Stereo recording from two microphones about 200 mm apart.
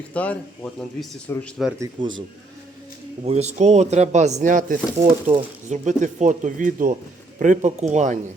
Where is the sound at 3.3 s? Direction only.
35° right (ahead or behind).